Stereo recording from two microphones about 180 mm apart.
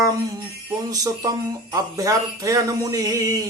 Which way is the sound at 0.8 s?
20° right (ahead or behind).